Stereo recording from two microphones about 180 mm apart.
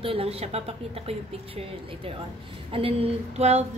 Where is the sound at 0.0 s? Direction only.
30° right (ahead or behind).